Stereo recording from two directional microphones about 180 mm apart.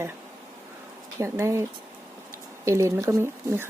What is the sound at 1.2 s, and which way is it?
Speech, 15° right (ahead or behind).